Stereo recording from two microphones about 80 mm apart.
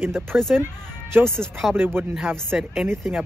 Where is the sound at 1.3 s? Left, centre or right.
Centre.